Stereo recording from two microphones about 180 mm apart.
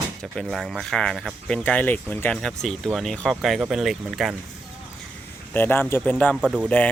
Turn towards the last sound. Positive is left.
turn(degrees=5)  # may be behind; listen again after turning